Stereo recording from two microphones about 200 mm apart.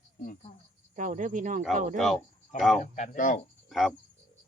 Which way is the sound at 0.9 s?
40° right (ahead or behind).